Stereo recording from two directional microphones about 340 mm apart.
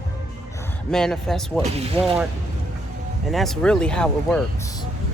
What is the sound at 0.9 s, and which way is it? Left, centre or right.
Speech, centre.